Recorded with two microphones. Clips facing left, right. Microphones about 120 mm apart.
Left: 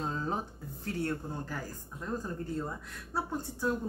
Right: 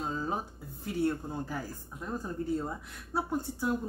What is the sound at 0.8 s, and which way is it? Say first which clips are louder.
Speech: right 4 dB; 15° right (ahead or behind).